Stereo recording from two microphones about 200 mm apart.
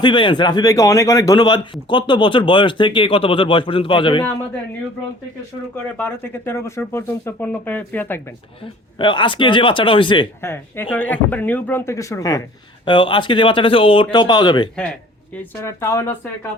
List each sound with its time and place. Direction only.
0.0 s a man's voice: 25° left (ahead or behind)
5.7 s speech: 10° left (ahead or behind)
9.0 s a man's voice: 25° left (ahead or behind)
10.4 s a man's voice: 10° left (ahead or behind)